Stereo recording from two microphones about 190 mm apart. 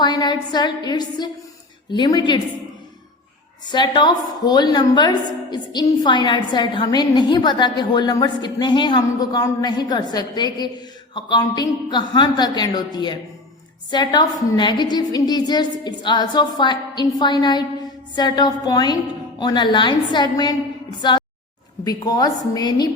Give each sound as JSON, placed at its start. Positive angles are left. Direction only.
{"t": 0.0, "sound": "a woman's voice", "side_deg": 20}
{"t": 3.7, "sound": "a woman's voice", "side_deg": 25}
{"t": 21.0, "sound": "music", "side_deg": 25}
{"t": 21.8, "sound": "a woman's voice", "side_deg": 20}